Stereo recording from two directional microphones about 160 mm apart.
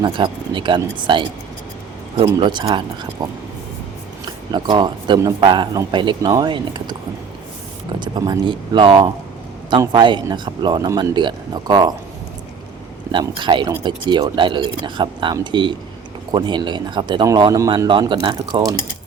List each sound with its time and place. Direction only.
0.0 s speech: 30° right (ahead or behind)
2.4 s speech: 30° right (ahead or behind)
7.9 s speech: 30° right (ahead or behind)
13.1 s speech: 30° right (ahead or behind)